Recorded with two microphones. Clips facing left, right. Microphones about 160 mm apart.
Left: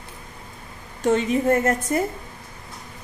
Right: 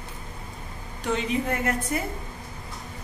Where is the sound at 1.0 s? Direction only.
45° left (ahead or behind).